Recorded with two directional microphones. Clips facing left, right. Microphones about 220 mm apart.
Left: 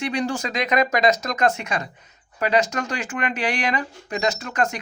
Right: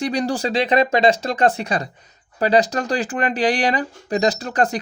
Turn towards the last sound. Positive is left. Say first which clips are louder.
# right 4 dB
turn(degrees=-35)  # may be behind; listen again after turning